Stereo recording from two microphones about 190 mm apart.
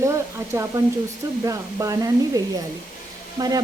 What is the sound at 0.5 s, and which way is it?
A woman's voice, 15° right (ahead or behind).